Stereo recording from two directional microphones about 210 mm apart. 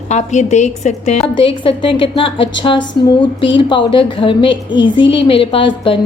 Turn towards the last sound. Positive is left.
turn(degrees=25)  # may be behind; listen again after turning